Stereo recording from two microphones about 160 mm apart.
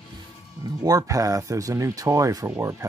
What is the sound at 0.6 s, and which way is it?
Speech, 25° right (ahead or behind).